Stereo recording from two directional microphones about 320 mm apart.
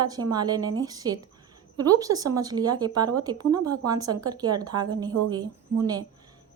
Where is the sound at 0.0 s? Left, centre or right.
Centre.